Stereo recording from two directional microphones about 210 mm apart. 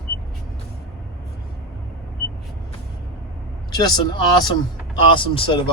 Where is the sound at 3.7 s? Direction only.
20° left (ahead or behind).